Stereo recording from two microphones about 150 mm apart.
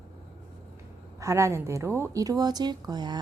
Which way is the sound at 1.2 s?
20° right (ahead or behind).